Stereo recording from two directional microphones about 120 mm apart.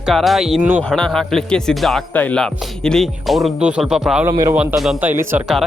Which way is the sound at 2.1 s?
15° left (ahead or behind).